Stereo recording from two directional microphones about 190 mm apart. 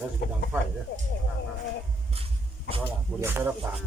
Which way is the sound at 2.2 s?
30° right (ahead or behind).